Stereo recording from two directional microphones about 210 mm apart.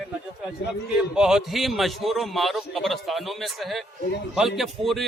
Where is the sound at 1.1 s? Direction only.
5° right (ahead or behind).